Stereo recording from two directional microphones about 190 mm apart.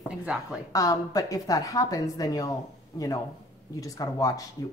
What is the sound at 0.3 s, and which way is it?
Speech, 5° right (ahead or behind).